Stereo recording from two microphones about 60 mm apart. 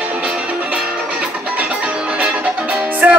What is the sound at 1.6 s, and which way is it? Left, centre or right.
Music, centre.